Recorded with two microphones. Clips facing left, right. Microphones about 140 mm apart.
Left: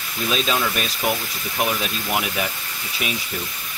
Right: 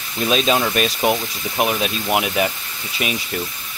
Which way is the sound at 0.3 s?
25° right (ahead or behind).